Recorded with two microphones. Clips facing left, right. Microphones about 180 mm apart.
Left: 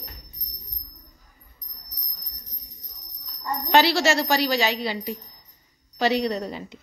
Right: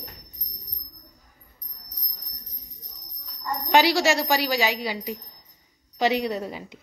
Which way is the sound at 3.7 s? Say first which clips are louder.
Even; 15° right (ahead or behind).